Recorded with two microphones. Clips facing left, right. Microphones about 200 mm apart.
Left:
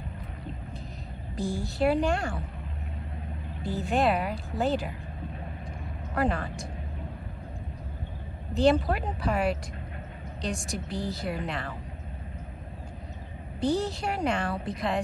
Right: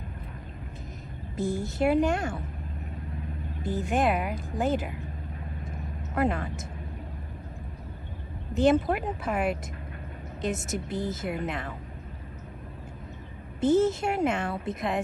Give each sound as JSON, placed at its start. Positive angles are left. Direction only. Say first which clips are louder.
{"t": 1.3, "sound": "a woman's voice", "louder": "right 2 dB", "side_deg": -20}
{"t": 3.6, "sound": "a woman's voice", "louder": "even", "side_deg": -20}
{"t": 5.7, "sound": "vehicle", "louder": "right 1 dB", "side_deg": -20}
{"t": 8.5, "sound": "a woman's voice", "louder": "right 1 dB", "side_deg": -20}
{"t": 13.6, "sound": "a woman's voice", "louder": "right 5 dB", "side_deg": -20}